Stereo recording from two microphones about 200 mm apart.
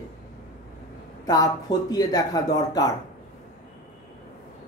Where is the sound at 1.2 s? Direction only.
20° left (ahead or behind).